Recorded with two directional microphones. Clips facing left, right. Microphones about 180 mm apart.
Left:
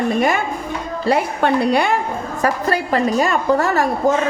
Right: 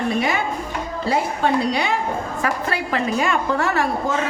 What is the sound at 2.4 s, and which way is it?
A woman's voice, 40° left (ahead or behind).